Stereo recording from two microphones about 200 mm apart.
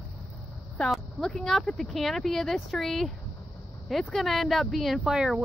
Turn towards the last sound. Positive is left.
turn(degrees=0)  # may be behind; listen again after turning